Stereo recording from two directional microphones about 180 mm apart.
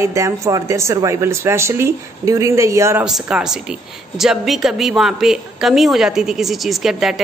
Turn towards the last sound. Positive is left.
turn(degrees=0)  # may be behind; listen again after turning